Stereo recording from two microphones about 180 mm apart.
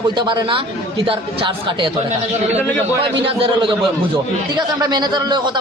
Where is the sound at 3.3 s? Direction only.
30° right (ahead or behind).